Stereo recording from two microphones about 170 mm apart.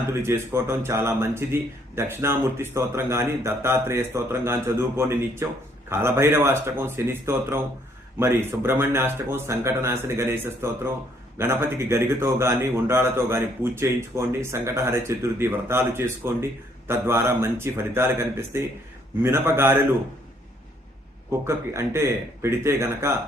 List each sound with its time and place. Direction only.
0.1 s a man's voice: 15° right (ahead or behind)
21.2 s a man's voice: 15° right (ahead or behind)